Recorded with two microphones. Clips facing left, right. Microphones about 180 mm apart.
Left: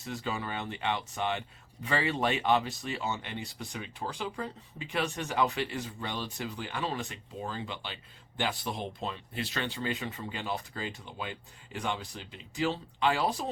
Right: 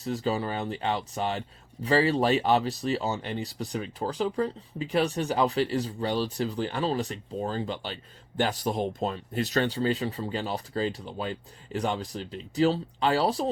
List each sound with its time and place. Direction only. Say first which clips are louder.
0.0 s speech: right 7 dB; 35° right (ahead or behind)